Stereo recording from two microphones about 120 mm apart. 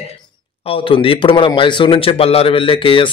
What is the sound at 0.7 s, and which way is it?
A man's voice, 50° left (ahead or behind).